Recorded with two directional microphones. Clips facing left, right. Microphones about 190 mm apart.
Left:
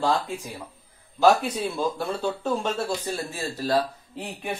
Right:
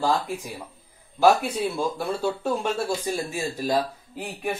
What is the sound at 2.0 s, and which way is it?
Speech, 5° right (ahead or behind).